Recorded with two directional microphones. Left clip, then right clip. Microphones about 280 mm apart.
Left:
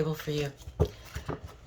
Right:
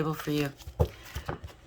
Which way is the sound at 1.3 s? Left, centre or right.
Centre.